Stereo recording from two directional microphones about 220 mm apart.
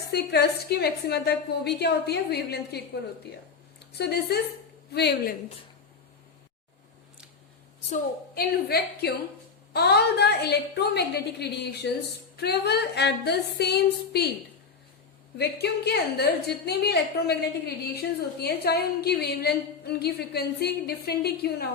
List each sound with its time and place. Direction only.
0.1 s a woman's voice: 50° left (ahead or behind)
3.9 s a woman's voice: 50° left (ahead or behind)
7.9 s a woman's voice: 40° left (ahead or behind)
15.4 s a woman's voice: 45° left (ahead or behind)